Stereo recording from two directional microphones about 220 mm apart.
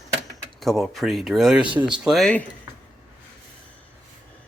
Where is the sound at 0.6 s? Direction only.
Centre (ahead or behind).